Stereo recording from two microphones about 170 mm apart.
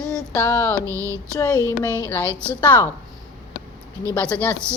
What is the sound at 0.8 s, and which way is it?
Music, 20° right (ahead or behind).